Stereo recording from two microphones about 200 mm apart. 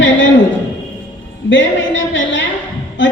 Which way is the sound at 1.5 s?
70° left (ahead or behind).